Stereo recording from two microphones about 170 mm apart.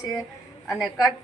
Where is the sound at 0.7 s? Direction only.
Centre (ahead or behind).